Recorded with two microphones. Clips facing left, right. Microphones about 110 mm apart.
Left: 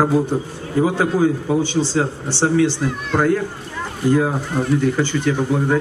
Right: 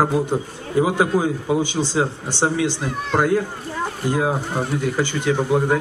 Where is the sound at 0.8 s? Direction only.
15° right (ahead or behind).